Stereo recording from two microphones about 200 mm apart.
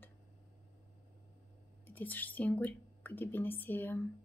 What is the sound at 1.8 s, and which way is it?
Speech, 10° left (ahead or behind).